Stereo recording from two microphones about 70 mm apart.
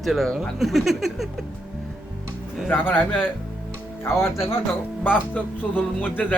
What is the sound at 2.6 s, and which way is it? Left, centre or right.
Speech, left.